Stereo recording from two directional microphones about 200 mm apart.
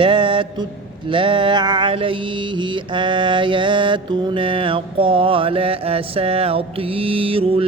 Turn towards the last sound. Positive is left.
turn(degrees=-30)  # may be behind; listen again after turning